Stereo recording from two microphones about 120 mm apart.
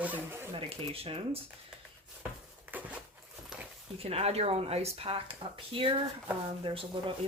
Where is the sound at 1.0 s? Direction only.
55° right (ahead or behind).